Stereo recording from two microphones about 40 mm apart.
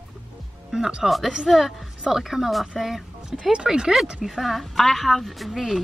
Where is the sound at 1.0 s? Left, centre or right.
Centre.